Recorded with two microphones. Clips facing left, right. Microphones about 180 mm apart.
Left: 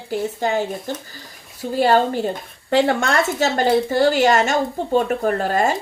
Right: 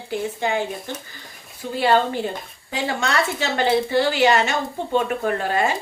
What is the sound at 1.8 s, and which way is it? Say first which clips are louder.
Speech: left 3 dB; 45° left (ahead or behind).